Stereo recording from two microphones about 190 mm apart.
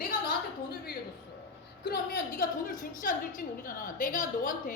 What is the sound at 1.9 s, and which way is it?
A woman's voice, 50° left (ahead or behind).